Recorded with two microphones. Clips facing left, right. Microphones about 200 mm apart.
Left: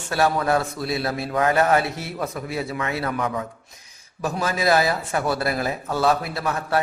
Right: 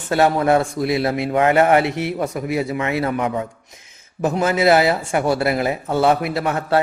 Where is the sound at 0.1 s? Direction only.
25° right (ahead or behind).